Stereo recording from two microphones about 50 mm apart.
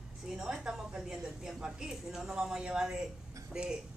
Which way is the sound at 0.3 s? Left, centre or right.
Centre.